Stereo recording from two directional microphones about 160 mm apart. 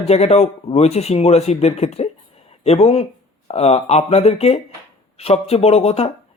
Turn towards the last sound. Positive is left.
turn(degrees=40)  # may be behind; listen again after turning